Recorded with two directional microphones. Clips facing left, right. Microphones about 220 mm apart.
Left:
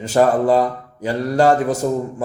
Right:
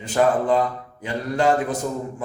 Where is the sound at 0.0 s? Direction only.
40° left (ahead or behind).